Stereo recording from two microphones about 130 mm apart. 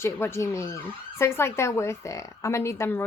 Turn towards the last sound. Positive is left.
turn(degrees=20)  # may be behind; listen again after turning